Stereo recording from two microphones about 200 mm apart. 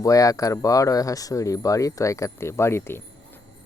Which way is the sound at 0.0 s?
15° left (ahead or behind).